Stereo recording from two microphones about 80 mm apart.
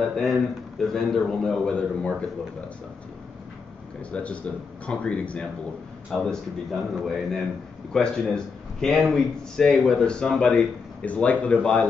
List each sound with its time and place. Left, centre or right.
0.0 s speech: centre
4.1 s speech: centre
6.1 s a man's voice: centre